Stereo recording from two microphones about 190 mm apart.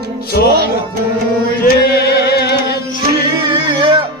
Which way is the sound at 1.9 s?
60° left (ahead or behind).